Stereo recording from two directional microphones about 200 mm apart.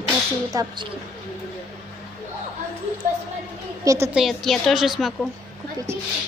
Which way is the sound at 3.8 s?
15° right (ahead or behind).